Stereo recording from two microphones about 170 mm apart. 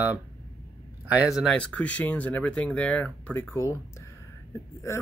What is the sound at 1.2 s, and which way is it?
Speech, centre (ahead or behind).